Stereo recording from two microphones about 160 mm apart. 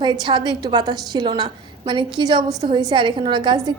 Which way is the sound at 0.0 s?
30° right (ahead or behind).